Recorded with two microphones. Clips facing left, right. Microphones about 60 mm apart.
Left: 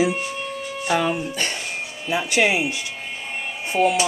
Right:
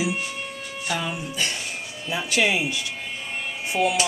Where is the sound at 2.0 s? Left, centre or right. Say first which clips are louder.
Left 3 dB; centre.